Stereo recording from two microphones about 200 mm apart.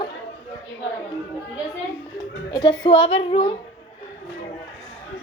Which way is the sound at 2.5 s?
20° left (ahead or behind).